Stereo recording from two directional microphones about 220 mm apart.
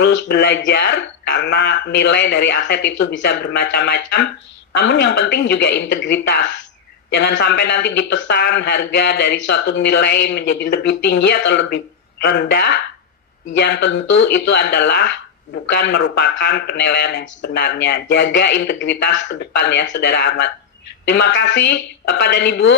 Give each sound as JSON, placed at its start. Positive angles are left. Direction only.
{"t": 0.0, "sound": "speech", "side_deg": 50}